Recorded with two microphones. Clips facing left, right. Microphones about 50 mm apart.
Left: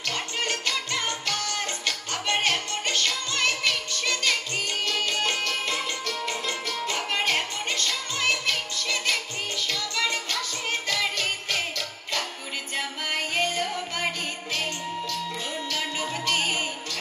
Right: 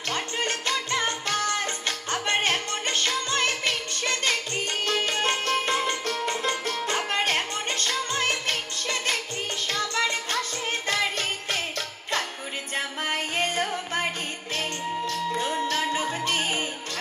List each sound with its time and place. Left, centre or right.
0.1 s music: right
12.7 s music: right
15.0 s music: right